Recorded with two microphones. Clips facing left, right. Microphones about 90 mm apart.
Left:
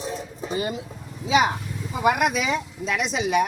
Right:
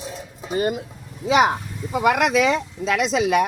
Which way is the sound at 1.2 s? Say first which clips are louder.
Right 3 dB; 65° right (ahead or behind).